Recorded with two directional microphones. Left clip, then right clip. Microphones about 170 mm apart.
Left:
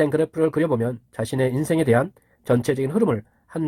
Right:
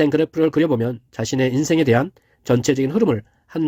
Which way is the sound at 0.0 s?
35° right (ahead or behind).